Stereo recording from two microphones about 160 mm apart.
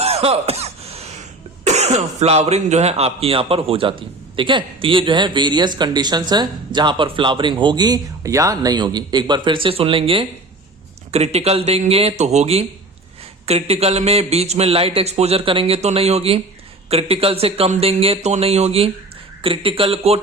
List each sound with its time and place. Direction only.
0.0 s cough: 40° right (ahead or behind)
1.6 s a man's voice: 45° right (ahead or behind)